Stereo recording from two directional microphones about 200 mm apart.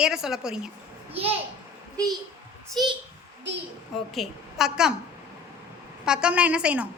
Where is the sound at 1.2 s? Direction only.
30° right (ahead or behind).